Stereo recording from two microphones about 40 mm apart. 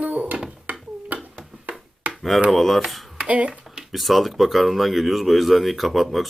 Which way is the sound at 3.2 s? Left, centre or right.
Right.